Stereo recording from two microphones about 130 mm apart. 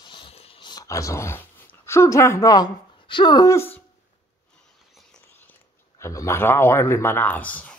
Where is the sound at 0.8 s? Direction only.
25° left (ahead or behind).